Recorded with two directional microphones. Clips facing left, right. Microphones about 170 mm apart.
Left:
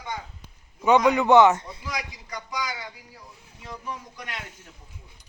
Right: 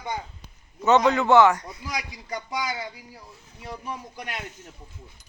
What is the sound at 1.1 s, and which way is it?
Speech, 15° left (ahead or behind).